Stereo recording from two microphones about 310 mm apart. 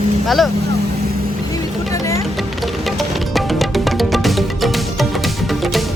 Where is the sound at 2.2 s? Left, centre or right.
Centre.